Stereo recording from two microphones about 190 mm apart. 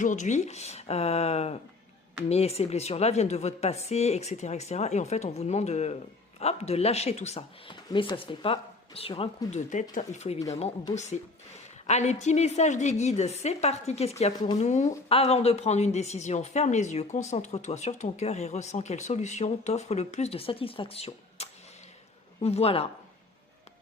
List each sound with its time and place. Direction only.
0.0 s a woman's voice: 40° left (ahead or behind)
11.9 s a woman's voice: 35° left (ahead or behind)